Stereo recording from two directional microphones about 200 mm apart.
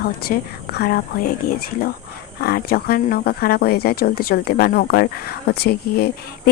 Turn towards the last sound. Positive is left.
turn(degrees=50)  # may be behind; listen again after turning